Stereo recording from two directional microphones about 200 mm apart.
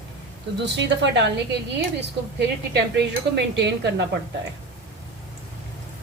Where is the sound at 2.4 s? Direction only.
55° right (ahead or behind).